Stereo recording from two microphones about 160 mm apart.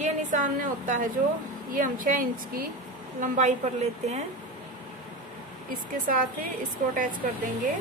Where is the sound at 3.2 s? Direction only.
50° right (ahead or behind).